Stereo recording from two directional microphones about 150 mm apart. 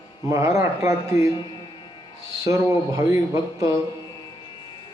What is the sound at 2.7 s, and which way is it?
Speech, 20° right (ahead or behind).